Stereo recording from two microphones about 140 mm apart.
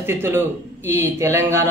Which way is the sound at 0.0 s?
15° right (ahead or behind).